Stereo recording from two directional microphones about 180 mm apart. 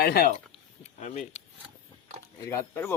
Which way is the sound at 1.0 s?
40° left (ahead or behind).